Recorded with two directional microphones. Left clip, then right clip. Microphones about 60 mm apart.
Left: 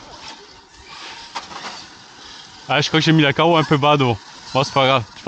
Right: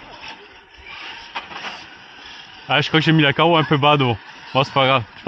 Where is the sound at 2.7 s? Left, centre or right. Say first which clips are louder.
Even; left.